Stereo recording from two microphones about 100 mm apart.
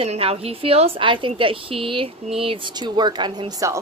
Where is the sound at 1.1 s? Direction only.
60° right (ahead or behind).